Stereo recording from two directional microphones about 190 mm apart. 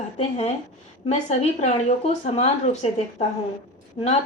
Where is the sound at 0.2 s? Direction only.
35° left (ahead or behind).